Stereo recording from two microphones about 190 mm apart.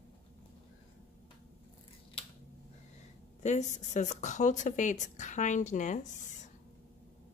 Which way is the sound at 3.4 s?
40° left (ahead or behind).